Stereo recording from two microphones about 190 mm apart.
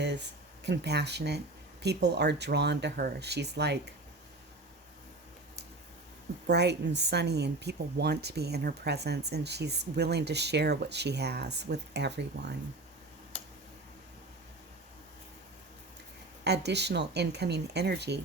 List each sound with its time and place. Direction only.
0.0 s a woman's voice: 65° right (ahead or behind)
6.5 s a woman's voice: 60° right (ahead or behind)
16.4 s a woman's voice: 60° right (ahead or behind)